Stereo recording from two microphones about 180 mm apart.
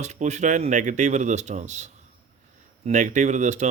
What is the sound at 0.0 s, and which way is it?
Speech, 40° right (ahead or behind).